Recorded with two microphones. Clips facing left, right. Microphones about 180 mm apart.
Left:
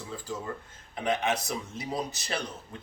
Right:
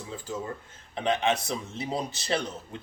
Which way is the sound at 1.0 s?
25° right (ahead or behind).